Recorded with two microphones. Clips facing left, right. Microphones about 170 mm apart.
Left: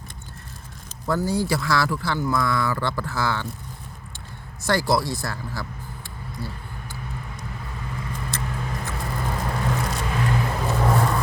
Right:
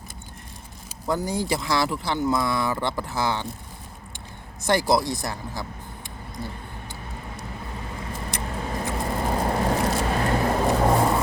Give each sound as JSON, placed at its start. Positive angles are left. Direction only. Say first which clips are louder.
{"t": 1.0, "sound": "speech", "louder": "left 2 dB", "side_deg": -20}
{"t": 4.6, "sound": "speech", "louder": "right 1 dB", "side_deg": -20}
{"t": 8.3, "sound": "vehicle", "louder": "right 3 dB", "side_deg": -15}
{"t": 9.0, "sound": "vehicle", "louder": "right 4 dB", "side_deg": -30}
{"t": 10.7, "sound": "vehicle", "louder": "right 1 dB", "side_deg": -25}